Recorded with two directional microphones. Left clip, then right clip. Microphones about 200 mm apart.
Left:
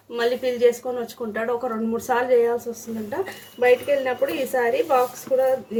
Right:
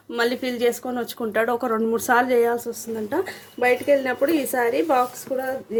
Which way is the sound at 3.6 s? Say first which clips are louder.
Even; 50° right (ahead or behind).